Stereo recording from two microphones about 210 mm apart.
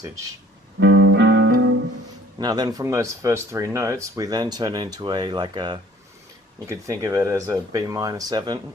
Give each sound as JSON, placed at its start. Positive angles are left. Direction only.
{"t": 0.8, "sound": "music", "side_deg": -60}
{"t": 2.4, "sound": "speech", "side_deg": -20}